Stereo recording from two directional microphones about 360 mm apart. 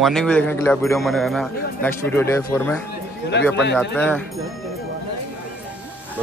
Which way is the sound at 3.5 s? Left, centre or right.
Left.